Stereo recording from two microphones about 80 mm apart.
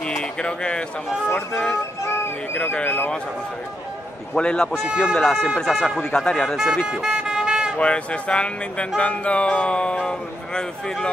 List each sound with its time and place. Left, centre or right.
0.0 s a sound: centre
1.3 s speech: left
4.4 s speech: centre
4.8 s speech: centre
5.2 s speech: centre
6.4 s speech: centre
6.9 s music: centre
7.7 s speech: centre